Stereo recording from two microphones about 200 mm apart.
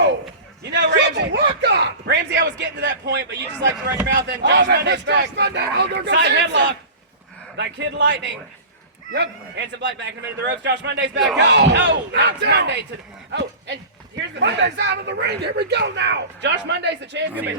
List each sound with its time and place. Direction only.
0.6 s a sound: 60° right (ahead or behind)
4.0 s a man's voice: 60° right (ahead or behind)
14.2 s a man's voice: 60° right (ahead or behind)